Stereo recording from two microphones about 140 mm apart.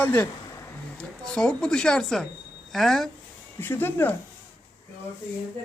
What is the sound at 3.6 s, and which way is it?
Speech, 15° left (ahead or behind).